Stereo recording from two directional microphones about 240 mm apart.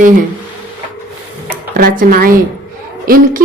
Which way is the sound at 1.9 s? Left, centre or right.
Right.